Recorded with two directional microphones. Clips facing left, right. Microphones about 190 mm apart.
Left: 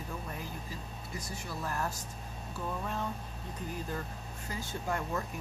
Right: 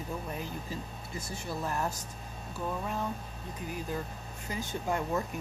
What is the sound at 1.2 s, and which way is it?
Speech, 20° right (ahead or behind).